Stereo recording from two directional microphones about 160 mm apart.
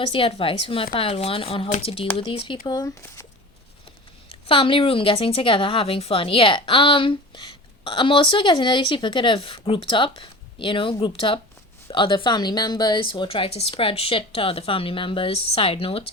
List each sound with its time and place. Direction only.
0.0 s a woman's voice: 35° left (ahead or behind)
2.6 s speech: 25° left (ahead or behind)
4.3 s a woman's voice: 35° left (ahead or behind)